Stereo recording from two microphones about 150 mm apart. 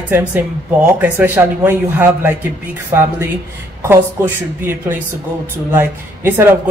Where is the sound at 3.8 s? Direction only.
15° right (ahead or behind).